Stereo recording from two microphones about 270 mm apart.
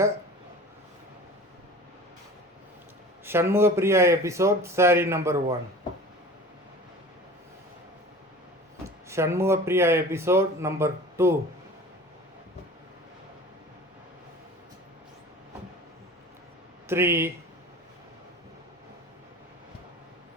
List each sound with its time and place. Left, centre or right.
3.2 s speech: centre
9.0 s speech: centre
16.9 s speech: centre